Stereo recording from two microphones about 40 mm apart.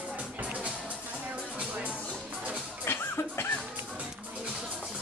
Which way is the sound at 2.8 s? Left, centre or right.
Left.